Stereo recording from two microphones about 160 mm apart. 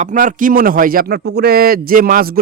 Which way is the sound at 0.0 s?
50° right (ahead or behind).